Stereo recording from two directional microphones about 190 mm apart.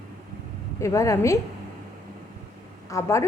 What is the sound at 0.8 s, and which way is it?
Speech, 15° left (ahead or behind).